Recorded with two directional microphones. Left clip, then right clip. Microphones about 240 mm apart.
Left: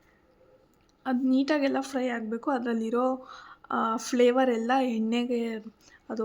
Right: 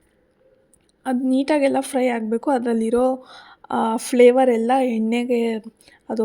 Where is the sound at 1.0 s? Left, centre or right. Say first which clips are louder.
Right 6 dB; right.